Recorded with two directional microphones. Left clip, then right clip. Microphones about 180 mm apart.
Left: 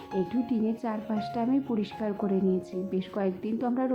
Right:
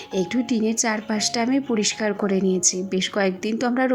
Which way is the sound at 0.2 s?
20° right (ahead or behind).